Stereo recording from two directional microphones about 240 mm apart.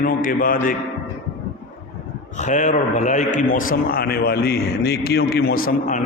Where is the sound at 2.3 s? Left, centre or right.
Left.